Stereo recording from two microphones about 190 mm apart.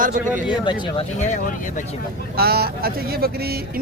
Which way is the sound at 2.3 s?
55° right (ahead or behind).